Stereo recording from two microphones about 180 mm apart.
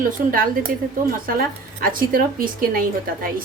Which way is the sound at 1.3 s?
50° right (ahead or behind).